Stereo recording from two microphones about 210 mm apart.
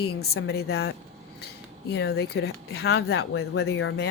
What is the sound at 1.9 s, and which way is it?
Speech, 50° left (ahead or behind).